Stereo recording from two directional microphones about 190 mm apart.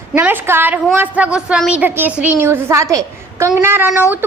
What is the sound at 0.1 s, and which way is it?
A child's voice, 10° right (ahead or behind).